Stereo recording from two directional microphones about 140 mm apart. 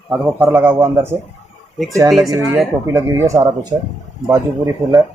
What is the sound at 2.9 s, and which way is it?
Speech, 20° right (ahead or behind).